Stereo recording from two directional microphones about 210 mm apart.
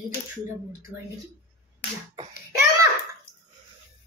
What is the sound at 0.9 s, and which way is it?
Speech, 10° right (ahead or behind).